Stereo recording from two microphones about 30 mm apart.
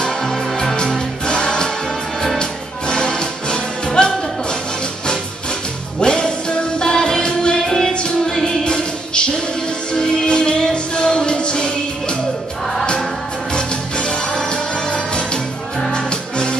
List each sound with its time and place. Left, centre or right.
0.2 s music: centre
0.7 s music: left
2.9 s music: left
5.9 s music: left
7.6 s music: centre
8.6 s music: left
13.5 s music: left